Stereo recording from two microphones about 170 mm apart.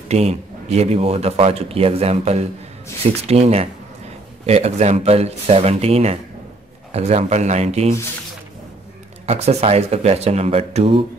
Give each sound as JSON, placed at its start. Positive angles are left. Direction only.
{"t": 0.1, "sound": "speech", "side_deg": -40}
{"t": 9.2, "sound": "speech", "side_deg": -40}